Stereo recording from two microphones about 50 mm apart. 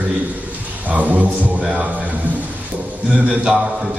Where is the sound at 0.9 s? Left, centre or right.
Right.